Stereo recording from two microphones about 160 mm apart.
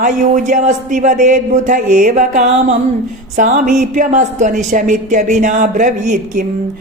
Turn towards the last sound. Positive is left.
turn(degrees=-50)  # may be behind; listen again after turning